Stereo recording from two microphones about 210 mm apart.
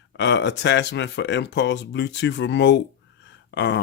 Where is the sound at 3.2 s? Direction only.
55° left (ahead or behind).